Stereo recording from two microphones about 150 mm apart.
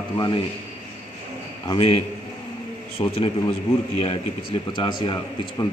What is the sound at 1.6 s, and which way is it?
A man's voice, 40° left (ahead or behind).